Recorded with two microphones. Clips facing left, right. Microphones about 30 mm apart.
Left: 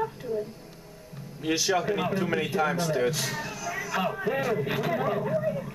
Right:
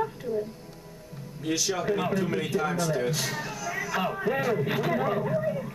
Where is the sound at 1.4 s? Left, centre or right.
Centre.